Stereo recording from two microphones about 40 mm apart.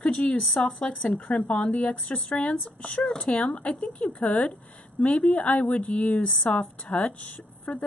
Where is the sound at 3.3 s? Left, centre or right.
Left.